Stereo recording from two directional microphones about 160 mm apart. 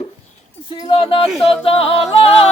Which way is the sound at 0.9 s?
35° left (ahead or behind).